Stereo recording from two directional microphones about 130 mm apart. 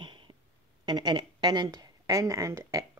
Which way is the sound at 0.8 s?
35° right (ahead or behind).